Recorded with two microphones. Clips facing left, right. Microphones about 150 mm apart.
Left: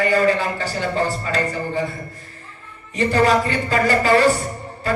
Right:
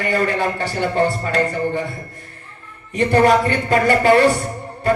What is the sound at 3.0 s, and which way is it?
Speech, 55° right (ahead or behind).